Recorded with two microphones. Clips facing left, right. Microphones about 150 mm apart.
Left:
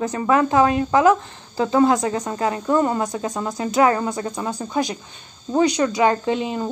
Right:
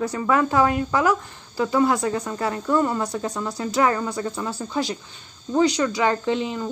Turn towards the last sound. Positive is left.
turn(degrees=20)  # may be behind; listen again after turning